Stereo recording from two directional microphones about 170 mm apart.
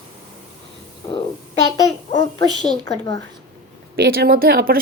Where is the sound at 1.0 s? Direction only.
30° left (ahead or behind).